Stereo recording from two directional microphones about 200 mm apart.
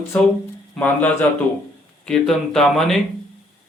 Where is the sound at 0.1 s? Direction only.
10° left (ahead or behind).